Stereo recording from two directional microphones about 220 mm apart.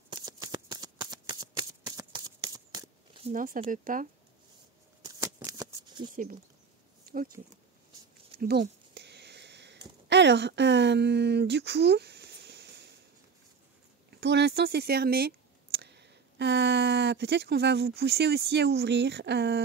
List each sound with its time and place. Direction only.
0.1 s shuffling cards: 15° right (ahead or behind)
3.3 s speech: 40° right (ahead or behind)
5.0 s shuffling cards: 15° right (ahead or behind)
7.1 s speech: 40° right (ahead or behind)
8.4 s a sound: 45° right (ahead or behind)
10.0 s speech: 50° right (ahead or behind)
14.1 s speech: 50° right (ahead or behind)